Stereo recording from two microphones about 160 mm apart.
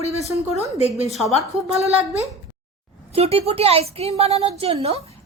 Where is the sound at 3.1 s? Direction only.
40° right (ahead or behind).